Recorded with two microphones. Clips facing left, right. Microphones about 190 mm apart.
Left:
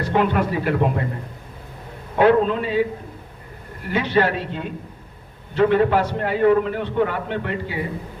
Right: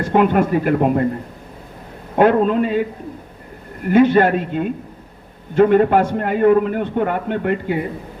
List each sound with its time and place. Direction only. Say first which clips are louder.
0.0 s a man's voice: right 5 dB; 50° right (ahead or behind)
2.1 s a man's voice: right 2 dB; 50° right (ahead or behind)
3.8 s a man's voice: right 7 dB; 50° right (ahead or behind)